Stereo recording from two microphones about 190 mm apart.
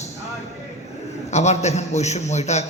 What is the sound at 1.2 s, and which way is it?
A man's voice, 35° left (ahead or behind).